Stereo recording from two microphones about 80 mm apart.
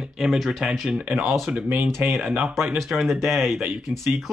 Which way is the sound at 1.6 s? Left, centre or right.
Right.